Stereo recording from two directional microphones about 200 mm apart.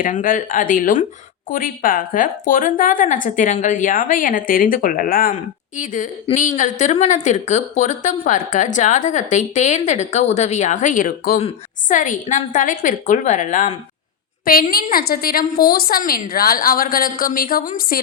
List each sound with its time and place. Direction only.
0.0 s a woman's voice: 40° left (ahead or behind)